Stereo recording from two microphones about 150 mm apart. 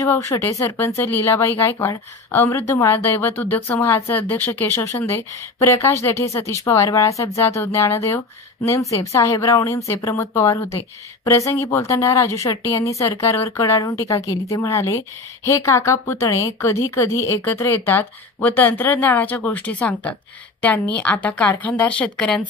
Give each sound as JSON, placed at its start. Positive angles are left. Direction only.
{"t": 0.0, "sound": "a woman's voice", "side_deg": 20}